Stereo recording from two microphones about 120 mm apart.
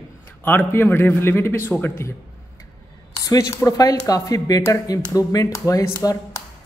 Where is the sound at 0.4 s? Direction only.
15° left (ahead or behind).